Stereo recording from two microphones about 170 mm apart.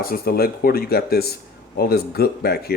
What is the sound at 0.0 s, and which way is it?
A man's voice, 60° left (ahead or behind).